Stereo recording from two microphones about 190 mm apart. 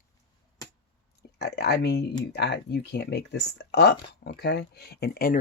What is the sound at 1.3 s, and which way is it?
Speech, 60° left (ahead or behind).